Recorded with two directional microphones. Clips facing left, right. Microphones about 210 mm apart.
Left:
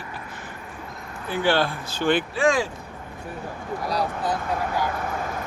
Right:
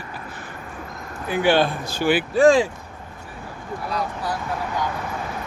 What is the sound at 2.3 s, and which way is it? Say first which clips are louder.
Speech: right 12 dB; 35° right (ahead or behind).